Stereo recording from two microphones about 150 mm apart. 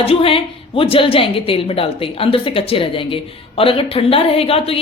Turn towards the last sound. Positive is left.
turn(degrees=40)  # may be behind; listen again after turning